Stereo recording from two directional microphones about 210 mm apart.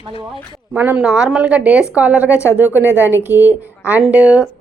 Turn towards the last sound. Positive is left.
turn(degrees=-5)  # may be behind; listen again after turning